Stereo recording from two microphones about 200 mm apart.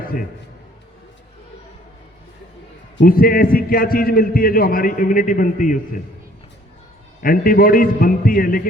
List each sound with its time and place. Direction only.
0.0 s a sound: 45° left (ahead or behind)
3.0 s a man's voice: 45° left (ahead or behind)
7.2 s a man's voice: 45° left (ahead or behind)